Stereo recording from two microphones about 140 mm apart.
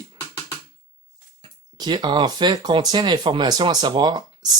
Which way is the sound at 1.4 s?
30° right (ahead or behind).